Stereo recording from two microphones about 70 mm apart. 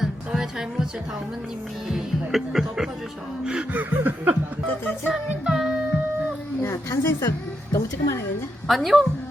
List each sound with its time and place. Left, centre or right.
0.0 s music: centre
1.9 s speech: centre
3.7 s chuckle: right
5.5 s music: centre
6.6 s speech: left
7.3 s music: left
8.6 s speech: centre